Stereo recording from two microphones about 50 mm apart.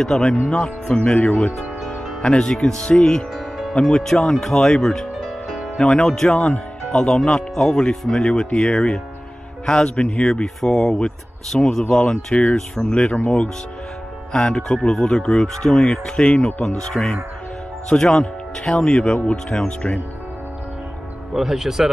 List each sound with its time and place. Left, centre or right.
0.0 s speech: centre
3.3 s music: centre
3.9 s speech: centre
5.1 s music: centre
5.8 s speech: centre
6.2 s speech: left
6.9 s speech: centre
18.0 s speech: left
21.3 s speech: centre